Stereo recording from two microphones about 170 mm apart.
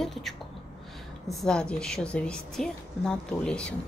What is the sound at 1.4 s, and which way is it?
A woman's voice, 5° left (ahead or behind).